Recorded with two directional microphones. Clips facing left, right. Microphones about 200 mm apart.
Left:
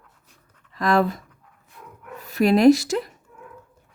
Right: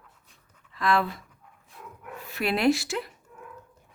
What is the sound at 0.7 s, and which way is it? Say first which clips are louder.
Speech: left 5 dB; 40° left (ahead or behind).